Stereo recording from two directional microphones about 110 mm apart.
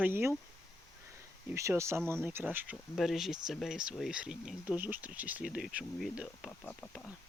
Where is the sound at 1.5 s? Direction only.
25° right (ahead or behind).